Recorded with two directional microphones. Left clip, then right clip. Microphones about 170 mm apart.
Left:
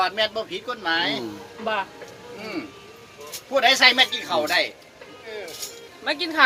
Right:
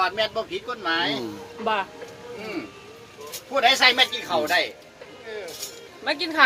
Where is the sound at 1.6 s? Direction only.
55° right (ahead or behind).